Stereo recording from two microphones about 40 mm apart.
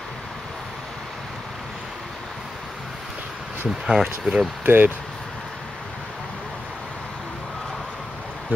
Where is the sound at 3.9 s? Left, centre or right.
Centre.